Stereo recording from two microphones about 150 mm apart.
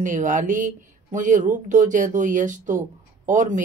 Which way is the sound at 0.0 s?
60° right (ahead or behind).